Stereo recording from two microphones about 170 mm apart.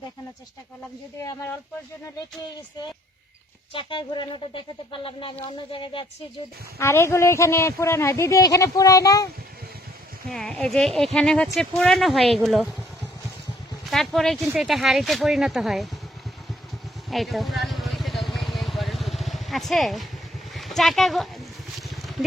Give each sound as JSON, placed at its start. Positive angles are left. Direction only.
{"t": 1.2, "sound": "speech", "side_deg": 15}
{"t": 3.7, "sound": "speech", "side_deg": 30}
{"t": 6.7, "sound": "speech", "side_deg": 15}
{"t": 10.2, "sound": "speech", "side_deg": 0}
{"t": 13.8, "sound": "speech", "side_deg": 0}
{"t": 17.1, "sound": "vehicle", "side_deg": 0}
{"t": 20.5, "sound": "a sound", "side_deg": 0}